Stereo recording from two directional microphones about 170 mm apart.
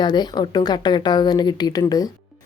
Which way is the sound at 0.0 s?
25° left (ahead or behind).